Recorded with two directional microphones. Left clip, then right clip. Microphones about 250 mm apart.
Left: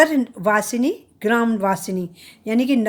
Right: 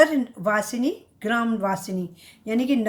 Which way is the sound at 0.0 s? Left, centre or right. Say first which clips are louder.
Left 2 dB; left.